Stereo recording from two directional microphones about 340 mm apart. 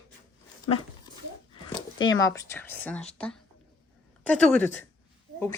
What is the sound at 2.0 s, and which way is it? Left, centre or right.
A woman's voice, centre.